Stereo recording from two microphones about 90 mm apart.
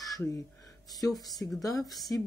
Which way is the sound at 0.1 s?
40° left (ahead or behind).